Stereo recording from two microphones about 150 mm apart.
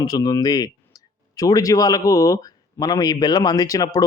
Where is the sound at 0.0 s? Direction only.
25° left (ahead or behind).